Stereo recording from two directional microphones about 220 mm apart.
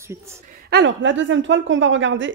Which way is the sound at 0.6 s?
50° right (ahead or behind).